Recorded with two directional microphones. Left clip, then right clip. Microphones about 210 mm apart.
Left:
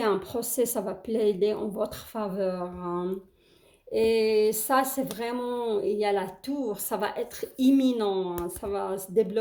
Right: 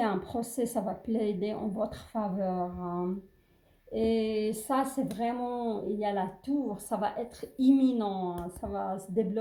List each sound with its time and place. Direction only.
0.0 s speech: 35° left (ahead or behind)